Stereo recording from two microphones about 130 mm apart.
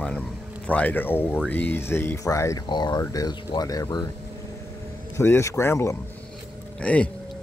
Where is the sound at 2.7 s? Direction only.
35° left (ahead or behind).